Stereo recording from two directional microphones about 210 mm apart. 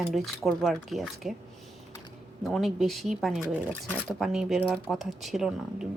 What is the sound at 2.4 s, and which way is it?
Speech, centre (ahead or behind).